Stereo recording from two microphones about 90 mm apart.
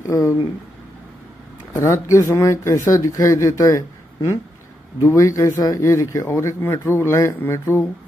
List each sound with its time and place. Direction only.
0.0 s speech: 35° left (ahead or behind)
1.7 s speech: 35° left (ahead or behind)
5.0 s speech: 35° left (ahead or behind)